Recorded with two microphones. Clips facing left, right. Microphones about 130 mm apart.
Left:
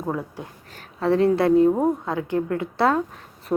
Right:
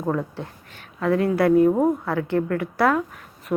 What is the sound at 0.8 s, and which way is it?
A woman's voice, 30° left (ahead or behind).